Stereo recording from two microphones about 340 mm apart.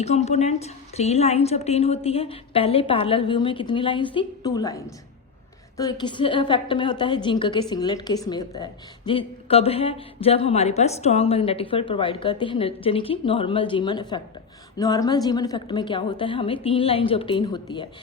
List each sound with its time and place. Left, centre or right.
0.0 s a woman's voice: centre